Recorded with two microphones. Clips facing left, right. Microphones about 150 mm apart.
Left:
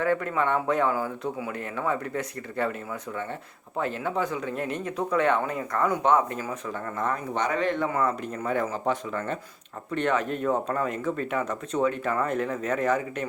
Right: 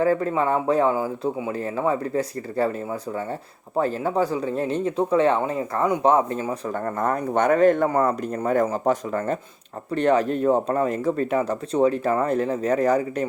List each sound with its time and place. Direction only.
0.0 s speech: 30° right (ahead or behind)
6.7 s speech: 45° right (ahead or behind)